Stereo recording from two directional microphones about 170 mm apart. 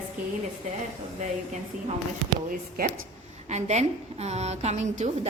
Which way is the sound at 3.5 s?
40° right (ahead or behind).